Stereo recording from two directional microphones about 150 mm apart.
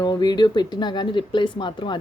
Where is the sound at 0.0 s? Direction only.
25° left (ahead or behind).